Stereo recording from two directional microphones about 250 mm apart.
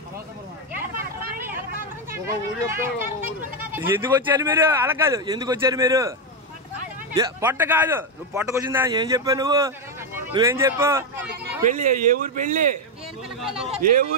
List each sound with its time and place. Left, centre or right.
1.2 s vehicle: centre
2.1 s a man's voice: centre
7.2 s a man's voice: centre
11.6 s speech: right
13.4 s speech: centre